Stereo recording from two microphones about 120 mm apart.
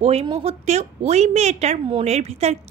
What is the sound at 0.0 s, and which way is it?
A woman's voice, 60° right (ahead or behind).